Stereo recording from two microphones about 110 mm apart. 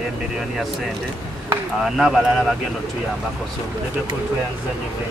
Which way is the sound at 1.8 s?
5° right (ahead or behind).